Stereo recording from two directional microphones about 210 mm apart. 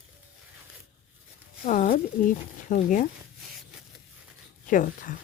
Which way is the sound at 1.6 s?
40° left (ahead or behind).